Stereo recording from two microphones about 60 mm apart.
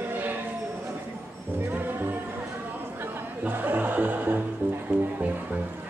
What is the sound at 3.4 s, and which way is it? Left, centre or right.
Music, right.